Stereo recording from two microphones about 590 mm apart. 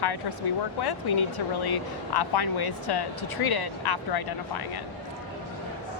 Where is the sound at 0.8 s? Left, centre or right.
Left.